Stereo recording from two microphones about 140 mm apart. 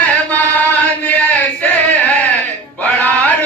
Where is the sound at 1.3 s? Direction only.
10° left (ahead or behind).